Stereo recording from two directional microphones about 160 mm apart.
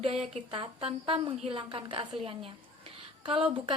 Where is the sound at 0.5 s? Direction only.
35° right (ahead or behind).